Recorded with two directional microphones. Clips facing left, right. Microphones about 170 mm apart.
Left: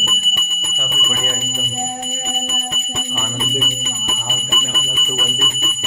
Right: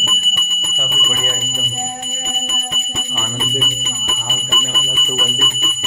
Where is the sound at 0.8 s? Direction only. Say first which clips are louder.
Right 1 dB; centre (ahead or behind).